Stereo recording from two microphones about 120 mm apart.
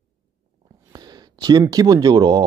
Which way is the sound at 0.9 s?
35° right (ahead or behind).